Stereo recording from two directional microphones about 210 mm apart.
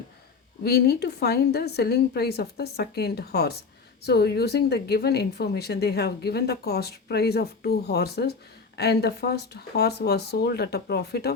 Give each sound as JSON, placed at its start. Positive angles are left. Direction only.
{"t": 0.6, "sound": "speech", "side_deg": 50}